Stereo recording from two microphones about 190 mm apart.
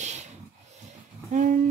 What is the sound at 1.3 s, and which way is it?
Speech, 40° right (ahead or behind).